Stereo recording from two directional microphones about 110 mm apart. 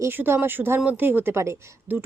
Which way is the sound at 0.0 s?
20° right (ahead or behind).